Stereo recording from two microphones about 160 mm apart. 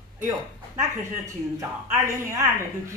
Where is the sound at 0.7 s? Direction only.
20° right (ahead or behind).